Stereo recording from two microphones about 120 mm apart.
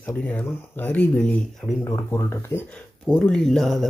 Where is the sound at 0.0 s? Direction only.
15° left (ahead or behind).